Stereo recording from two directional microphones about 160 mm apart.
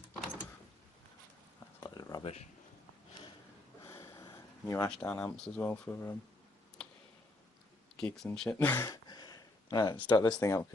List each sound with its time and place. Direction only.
1.8 s a sound: 25° left (ahead or behind)
2.2 s speech: 40° left (ahead or behind)
3.8 s a sound: 15° left (ahead or behind)
4.9 s speech: 10° left (ahead or behind)
7.9 s speech: 5° left (ahead or behind)
8.5 s speech: 15° left (ahead or behind)
8.9 s a sound: 25° left (ahead or behind)
10.1 s speech: 30° left (ahead or behind)
10.4 s speech: 20° left (ahead or behind)